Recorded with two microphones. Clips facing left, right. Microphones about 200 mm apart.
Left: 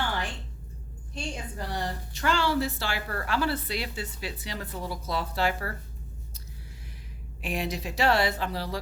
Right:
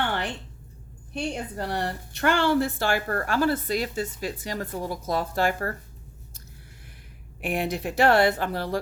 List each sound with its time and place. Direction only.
0.0 s a sound: 65° right (ahead or behind)
1.1 s a woman's voice: 60° right (ahead or behind)
7.4 s speech: 55° right (ahead or behind)